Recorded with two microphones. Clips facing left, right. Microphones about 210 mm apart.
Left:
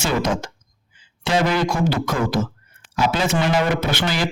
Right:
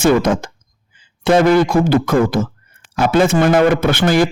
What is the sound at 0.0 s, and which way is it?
A man's voice, 55° right (ahead or behind).